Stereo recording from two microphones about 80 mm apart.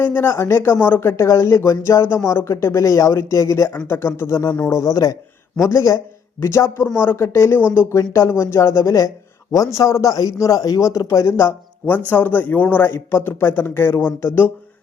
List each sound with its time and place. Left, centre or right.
0.0 s speech: left
3.7 s a man's voice: left